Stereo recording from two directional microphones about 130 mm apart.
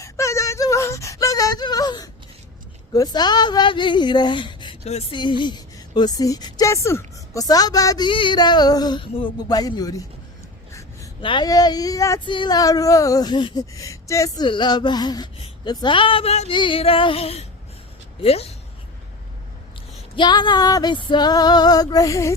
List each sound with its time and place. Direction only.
0.0 s a sound: 25° left (ahead or behind)
2.9 s speech: 30° left (ahead or behind)
10.7 s gasp: 25° left (ahead or behind)
11.2 s speech: 40° left (ahead or behind)
12.2 s speech: 35° left (ahead or behind)
14.4 s speech: 35° left (ahead or behind); by 16.5 s 55° left (ahead or behind)
16.5 s music: 40° left (ahead or behind)
20.1 s speech: 35° left (ahead or behind)